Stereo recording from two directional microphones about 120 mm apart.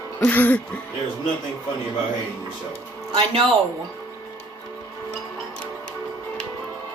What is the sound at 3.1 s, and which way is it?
Speech, 55° right (ahead or behind).